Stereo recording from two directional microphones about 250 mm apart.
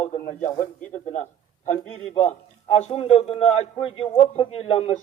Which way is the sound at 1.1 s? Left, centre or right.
Left.